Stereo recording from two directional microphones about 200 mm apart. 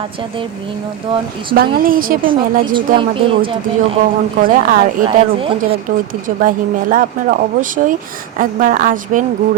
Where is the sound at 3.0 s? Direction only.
25° right (ahead or behind).